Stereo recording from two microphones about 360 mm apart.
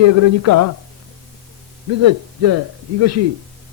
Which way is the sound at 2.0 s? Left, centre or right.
Right.